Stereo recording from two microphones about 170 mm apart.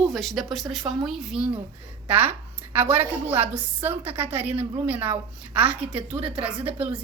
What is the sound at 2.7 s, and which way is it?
A woman's voice, 10° right (ahead or behind).